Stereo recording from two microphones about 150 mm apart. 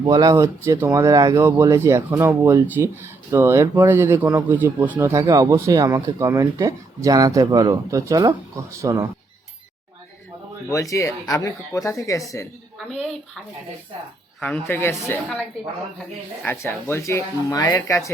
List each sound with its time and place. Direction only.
0.0 s speech: 30° right (ahead or behind)
10.7 s speech: 20° left (ahead or behind)
12.9 s speech: 5° left (ahead or behind)
14.4 s speech: 10° left (ahead or behind)
16.4 s speech: 15° left (ahead or behind)